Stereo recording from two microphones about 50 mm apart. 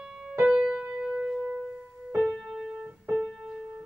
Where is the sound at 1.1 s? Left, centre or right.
Centre.